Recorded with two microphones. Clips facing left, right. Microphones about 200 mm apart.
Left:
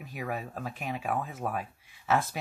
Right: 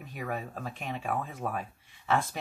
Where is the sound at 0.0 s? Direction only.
5° left (ahead or behind).